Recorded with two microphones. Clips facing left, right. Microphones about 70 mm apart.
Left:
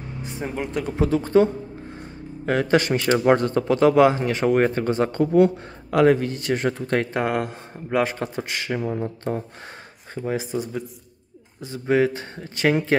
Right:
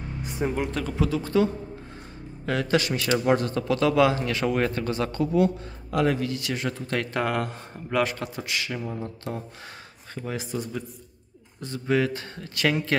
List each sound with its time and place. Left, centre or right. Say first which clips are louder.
0.4 s speech: right 4 dB; centre
0.9 s speech: left 6 dB; left
5.2 s a man's voice: left 5 dB; left
7.2 s speech: left 3 dB; centre; by 9.4 s left
10.1 s speech: left 5 dB; left
11.8 s speech: left 4 dB; left